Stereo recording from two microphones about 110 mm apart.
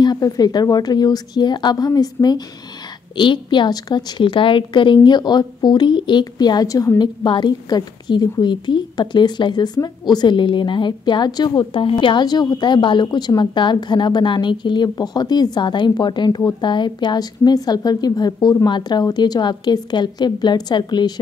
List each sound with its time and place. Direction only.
0.0 s a woman's voice: 35° left (ahead or behind)
3.2 s a woman's voice: 45° left (ahead or behind)